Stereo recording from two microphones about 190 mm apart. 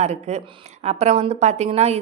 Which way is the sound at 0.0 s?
35° right (ahead or behind).